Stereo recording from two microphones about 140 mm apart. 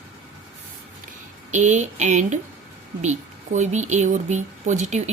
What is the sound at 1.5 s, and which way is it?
A woman's voice, 60° right (ahead or behind).